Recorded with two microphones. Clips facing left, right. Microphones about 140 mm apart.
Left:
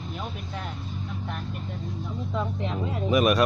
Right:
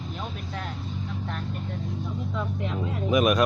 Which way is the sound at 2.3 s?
25° left (ahead or behind).